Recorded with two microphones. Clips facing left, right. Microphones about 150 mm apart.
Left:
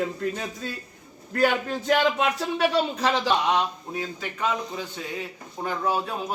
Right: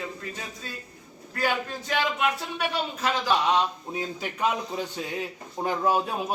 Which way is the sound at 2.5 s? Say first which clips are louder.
Left 6 dB; 30° left (ahead or behind).